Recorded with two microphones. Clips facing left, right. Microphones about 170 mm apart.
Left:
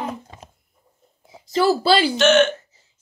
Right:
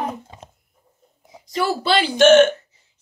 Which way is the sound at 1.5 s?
30° left (ahead or behind).